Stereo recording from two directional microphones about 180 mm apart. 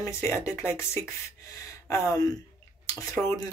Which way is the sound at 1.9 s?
20° left (ahead or behind).